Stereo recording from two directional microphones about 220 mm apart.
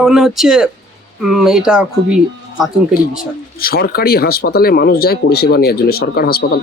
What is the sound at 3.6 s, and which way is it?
Speech, 45° left (ahead or behind).